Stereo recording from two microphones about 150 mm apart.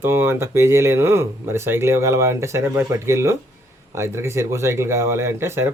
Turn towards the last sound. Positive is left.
turn(degrees=-15)  # may be behind; listen again after turning